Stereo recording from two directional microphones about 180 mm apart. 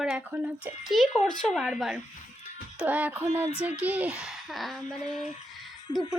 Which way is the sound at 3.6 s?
10° right (ahead or behind).